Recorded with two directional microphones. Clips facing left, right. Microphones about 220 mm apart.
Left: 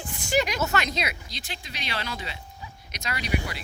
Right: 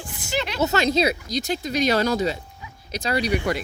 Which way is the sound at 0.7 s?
30° right (ahead or behind).